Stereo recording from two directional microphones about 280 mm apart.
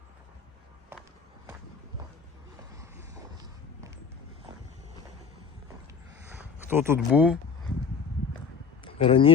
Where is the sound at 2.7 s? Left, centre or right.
Centre.